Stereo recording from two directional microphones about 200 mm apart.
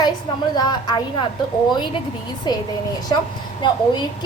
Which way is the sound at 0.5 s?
20° left (ahead or behind).